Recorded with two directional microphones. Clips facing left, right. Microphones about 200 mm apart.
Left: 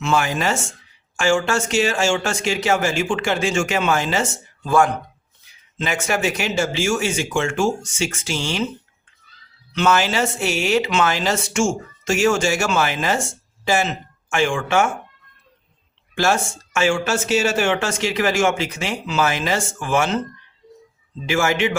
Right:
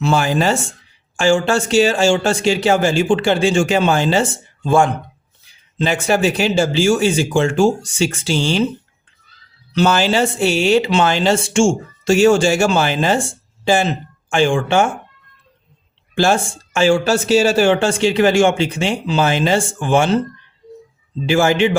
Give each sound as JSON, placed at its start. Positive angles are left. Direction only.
{"t": 0.0, "sound": "speech", "side_deg": -35}
{"t": 9.7, "sound": "speech", "side_deg": -35}
{"t": 16.1, "sound": "speech", "side_deg": -30}
{"t": 21.2, "sound": "speech", "side_deg": -30}